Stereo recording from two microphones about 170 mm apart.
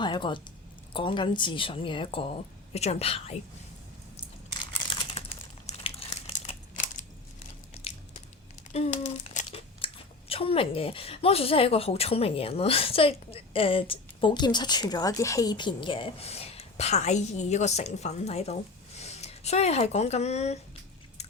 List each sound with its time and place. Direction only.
0.0 s a woman's voice: 25° left (ahead or behind)
5.2 s crumpling: 40° left (ahead or behind)
7.7 s a sound: 35° left (ahead or behind)
8.7 s crumpling: 40° left (ahead or behind)
9.5 s speech: 35° left (ahead or behind)